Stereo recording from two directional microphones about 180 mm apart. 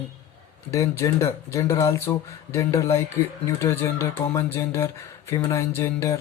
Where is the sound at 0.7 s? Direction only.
20° left (ahead or behind).